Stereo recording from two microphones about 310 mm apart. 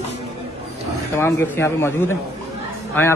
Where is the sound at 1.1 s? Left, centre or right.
Centre.